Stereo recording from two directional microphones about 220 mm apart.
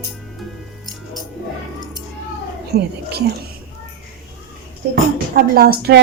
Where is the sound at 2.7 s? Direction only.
45° right (ahead or behind).